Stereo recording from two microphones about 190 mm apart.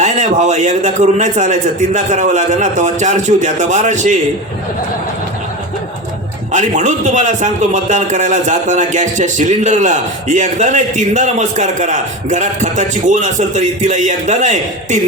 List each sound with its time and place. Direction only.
0.0 s a man's voice: 40° right (ahead or behind)
6.5 s a man's voice: 40° right (ahead or behind)